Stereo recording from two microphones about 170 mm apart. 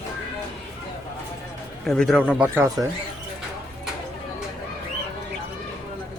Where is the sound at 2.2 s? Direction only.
10° right (ahead or behind).